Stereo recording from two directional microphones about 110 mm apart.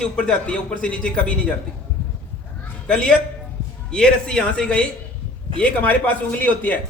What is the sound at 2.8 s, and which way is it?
A man's voice, 10° left (ahead or behind).